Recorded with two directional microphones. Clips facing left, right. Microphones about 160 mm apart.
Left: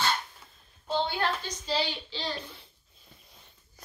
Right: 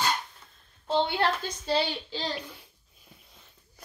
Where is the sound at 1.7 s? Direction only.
50° right (ahead or behind).